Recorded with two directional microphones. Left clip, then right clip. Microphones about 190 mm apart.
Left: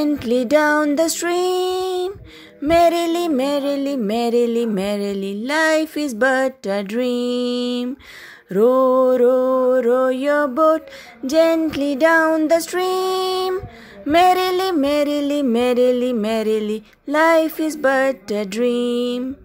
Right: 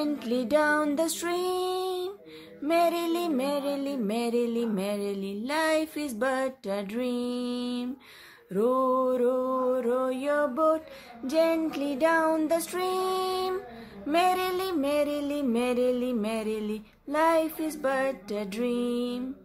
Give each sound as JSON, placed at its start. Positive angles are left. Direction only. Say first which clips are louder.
{"t": 0.0, "sound": "music", "louder": "left 10 dB", "side_deg": 40}